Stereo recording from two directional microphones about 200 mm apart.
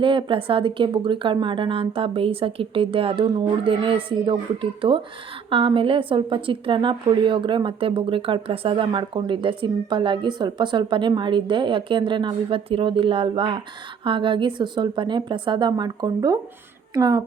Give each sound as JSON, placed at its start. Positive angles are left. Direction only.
{"t": 0.0, "sound": "a woman's voice", "side_deg": -25}